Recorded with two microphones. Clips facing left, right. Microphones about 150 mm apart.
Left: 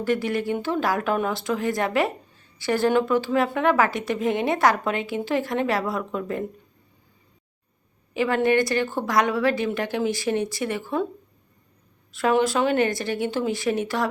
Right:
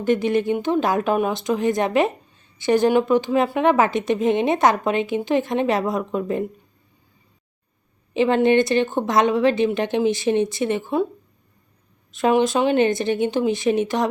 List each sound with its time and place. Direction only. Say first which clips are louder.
0.0 s speech: right 5 dB; 20° right (ahead or behind)
8.1 s speech: right 4 dB; 25° right (ahead or behind)
12.1 s speech: right 3 dB; 20° right (ahead or behind)